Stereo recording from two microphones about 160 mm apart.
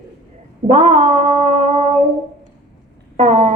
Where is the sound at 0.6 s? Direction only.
45° right (ahead or behind).